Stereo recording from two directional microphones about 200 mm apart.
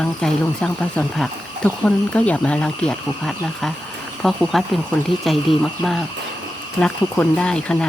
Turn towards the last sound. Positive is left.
turn(degrees=5)  # may be behind; listen again after turning